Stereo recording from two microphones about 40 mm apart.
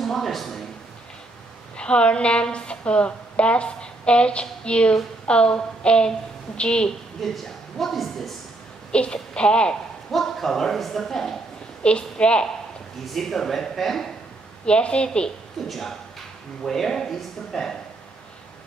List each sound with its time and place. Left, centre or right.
0.0 s speech: centre
1.8 s a woman's voice: left
7.2 s speech: centre
8.9 s a woman's voice: left
10.1 s speech: centre
11.8 s a woman's voice: left
13.0 s speech: centre
14.7 s a woman's voice: left
15.7 s speech: centre